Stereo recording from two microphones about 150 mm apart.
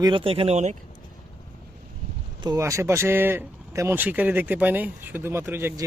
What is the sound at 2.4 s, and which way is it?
Speech, 25° right (ahead or behind).